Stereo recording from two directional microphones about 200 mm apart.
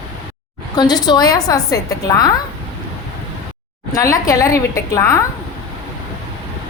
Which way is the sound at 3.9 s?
15° left (ahead or behind).